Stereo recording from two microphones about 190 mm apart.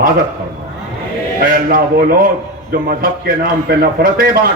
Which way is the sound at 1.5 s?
50° right (ahead or behind).